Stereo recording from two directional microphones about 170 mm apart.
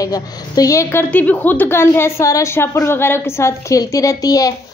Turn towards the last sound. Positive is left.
turn(degrees=20)  # may be behind; listen again after turning